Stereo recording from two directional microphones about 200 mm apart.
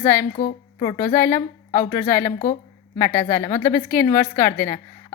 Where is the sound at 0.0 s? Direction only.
10° left (ahead or behind).